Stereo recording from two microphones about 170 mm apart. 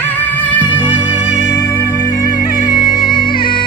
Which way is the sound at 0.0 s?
10° left (ahead or behind).